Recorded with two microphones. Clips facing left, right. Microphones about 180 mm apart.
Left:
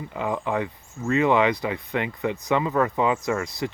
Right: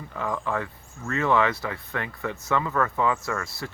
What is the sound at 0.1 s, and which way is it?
Speech, 20° left (ahead or behind).